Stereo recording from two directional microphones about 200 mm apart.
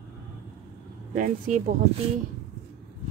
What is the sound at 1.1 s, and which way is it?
Speech, 40° right (ahead or behind).